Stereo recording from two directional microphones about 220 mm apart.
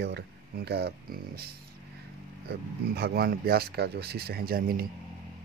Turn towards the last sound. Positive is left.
turn(degrees=-40)  # may be behind; listen again after turning